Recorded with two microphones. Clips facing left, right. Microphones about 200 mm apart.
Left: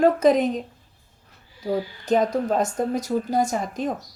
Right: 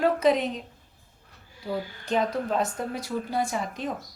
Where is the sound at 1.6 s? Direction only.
45° left (ahead or behind).